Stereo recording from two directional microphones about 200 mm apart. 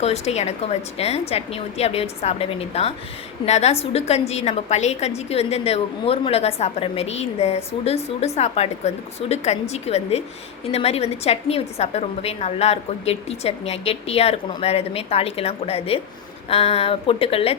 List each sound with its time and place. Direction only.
0.0 s a woman's voice: 30° left (ahead or behind)